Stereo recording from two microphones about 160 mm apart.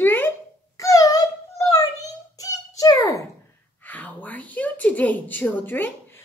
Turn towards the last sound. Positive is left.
turn(degrees=10)  # may be behind; listen again after turning